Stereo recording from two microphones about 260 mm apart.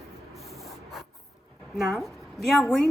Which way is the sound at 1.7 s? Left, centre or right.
Centre.